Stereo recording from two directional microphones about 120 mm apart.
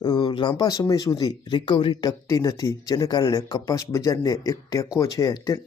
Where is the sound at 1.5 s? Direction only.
45° left (ahead or behind).